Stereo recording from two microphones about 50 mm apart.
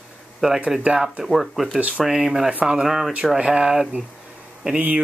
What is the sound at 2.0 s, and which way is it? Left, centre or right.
Speech, centre.